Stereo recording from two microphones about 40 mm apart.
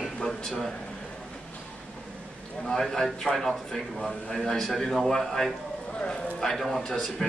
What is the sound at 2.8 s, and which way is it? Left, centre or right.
A man's voice, centre.